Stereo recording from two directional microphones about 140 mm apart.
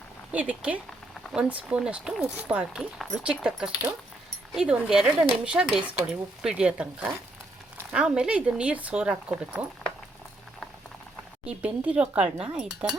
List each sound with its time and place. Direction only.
0.3 s speech: 10° right (ahead or behind)
11.4 s speech: 10° right (ahead or behind)